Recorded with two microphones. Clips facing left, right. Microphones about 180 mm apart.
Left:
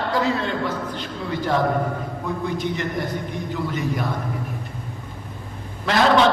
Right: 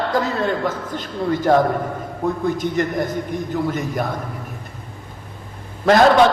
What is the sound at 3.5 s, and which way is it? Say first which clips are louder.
Speech: right 2 dB; 45° right (ahead or behind).